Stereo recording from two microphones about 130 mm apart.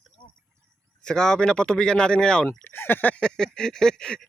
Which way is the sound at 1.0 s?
5° left (ahead or behind).